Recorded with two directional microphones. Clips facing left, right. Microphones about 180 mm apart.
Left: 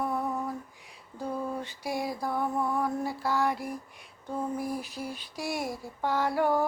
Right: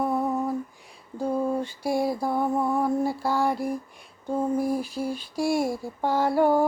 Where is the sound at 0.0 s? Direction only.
25° right (ahead or behind).